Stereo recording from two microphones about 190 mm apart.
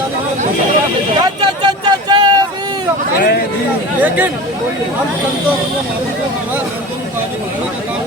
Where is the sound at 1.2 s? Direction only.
20° right (ahead or behind).